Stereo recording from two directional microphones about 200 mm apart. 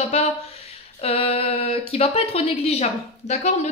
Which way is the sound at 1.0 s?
30° left (ahead or behind).